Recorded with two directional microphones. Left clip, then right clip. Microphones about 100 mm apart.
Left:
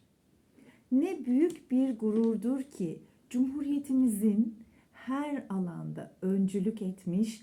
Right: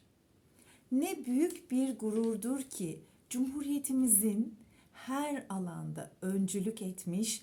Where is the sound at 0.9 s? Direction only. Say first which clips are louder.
Left 4 dB; 25° right (ahead or behind).